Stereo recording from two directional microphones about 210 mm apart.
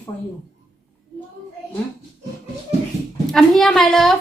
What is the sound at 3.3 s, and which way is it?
Speech, centre (ahead or behind).